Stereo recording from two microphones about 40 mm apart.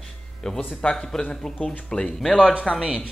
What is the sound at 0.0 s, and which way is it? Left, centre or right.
Music, centre.